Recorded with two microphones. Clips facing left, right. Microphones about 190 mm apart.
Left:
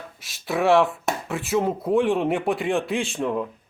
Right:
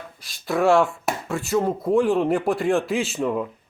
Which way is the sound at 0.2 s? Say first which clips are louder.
Right 2 dB; centre (ahead or behind).